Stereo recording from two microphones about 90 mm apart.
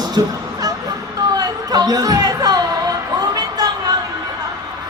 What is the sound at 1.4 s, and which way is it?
Chatter, 45° right (ahead or behind).